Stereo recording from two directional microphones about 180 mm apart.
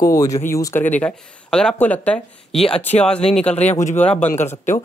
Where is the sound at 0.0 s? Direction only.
20° left (ahead or behind).